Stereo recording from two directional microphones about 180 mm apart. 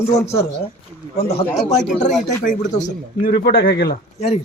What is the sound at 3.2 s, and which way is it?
Speech, 60° left (ahead or behind).